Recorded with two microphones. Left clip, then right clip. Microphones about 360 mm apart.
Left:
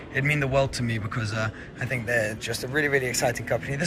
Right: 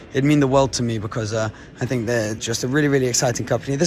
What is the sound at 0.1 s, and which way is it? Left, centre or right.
Speech, centre.